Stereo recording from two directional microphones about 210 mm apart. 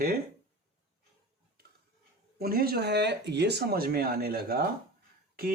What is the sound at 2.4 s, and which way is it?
Speech, 45° right (ahead or behind).